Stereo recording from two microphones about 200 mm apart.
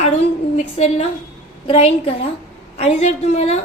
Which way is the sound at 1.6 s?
30° left (ahead or behind).